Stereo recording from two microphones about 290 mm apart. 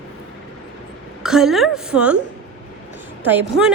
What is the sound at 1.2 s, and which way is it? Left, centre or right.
Speech, centre.